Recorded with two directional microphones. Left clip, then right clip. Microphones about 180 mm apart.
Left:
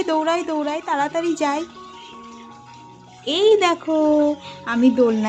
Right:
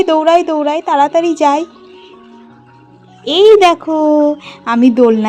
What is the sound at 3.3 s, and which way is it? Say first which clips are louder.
A woman's voice: right 9 dB; 35° right (ahead or behind).